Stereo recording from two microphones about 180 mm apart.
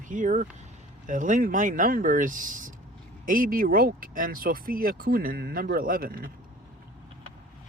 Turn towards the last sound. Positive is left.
turn(degrees=-55)  # may be behind; listen again after turning